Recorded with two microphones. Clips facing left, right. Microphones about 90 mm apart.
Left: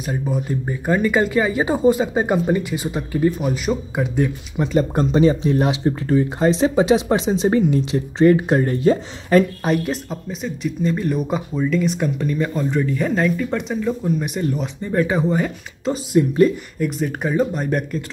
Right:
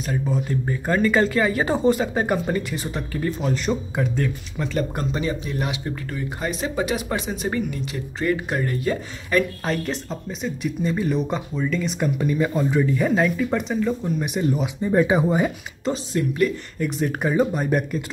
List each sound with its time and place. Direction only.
0.0 s speech: 15° left (ahead or behind)
9.8 s speech: 5° left (ahead or behind)
15.8 s speech: 5° left (ahead or behind)